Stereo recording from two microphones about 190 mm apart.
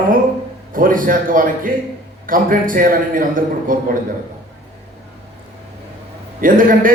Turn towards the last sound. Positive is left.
turn(degrees=-45)  # may be behind; listen again after turning